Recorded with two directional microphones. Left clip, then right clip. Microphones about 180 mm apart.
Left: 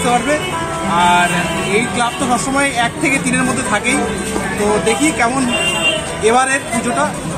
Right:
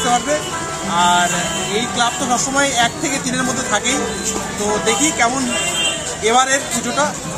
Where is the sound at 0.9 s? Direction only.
10° right (ahead or behind).